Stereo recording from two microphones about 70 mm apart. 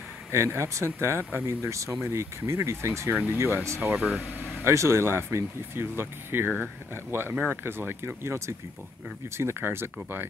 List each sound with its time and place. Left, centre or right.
0.3 s speech: right